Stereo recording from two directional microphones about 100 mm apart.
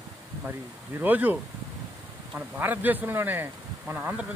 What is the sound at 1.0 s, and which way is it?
Speech, 20° right (ahead or behind).